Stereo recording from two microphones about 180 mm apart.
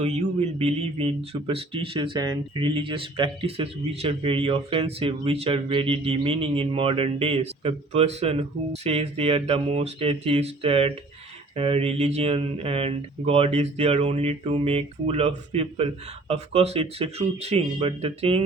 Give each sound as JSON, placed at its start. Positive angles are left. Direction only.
{"t": 0.0, "sound": "speech", "side_deg": -35}